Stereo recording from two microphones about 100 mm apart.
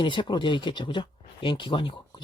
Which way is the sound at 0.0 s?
55° left (ahead or behind).